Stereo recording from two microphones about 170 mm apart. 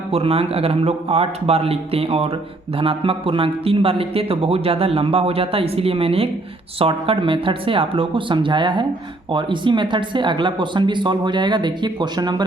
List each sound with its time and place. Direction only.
0.1 s a man's voice: 35° right (ahead or behind)